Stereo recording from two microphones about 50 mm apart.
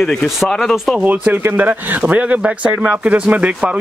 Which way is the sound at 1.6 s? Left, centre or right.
Right.